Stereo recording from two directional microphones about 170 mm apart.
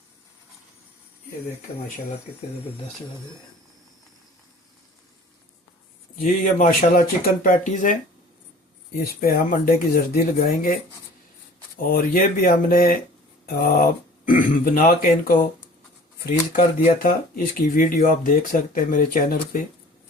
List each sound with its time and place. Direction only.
6.2 s speech: 50° left (ahead or behind)
9.0 s speech: 60° left (ahead or behind)
11.8 s speech: 55° left (ahead or behind)